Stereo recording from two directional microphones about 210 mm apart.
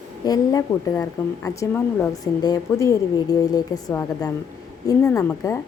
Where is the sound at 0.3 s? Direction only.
15° left (ahead or behind).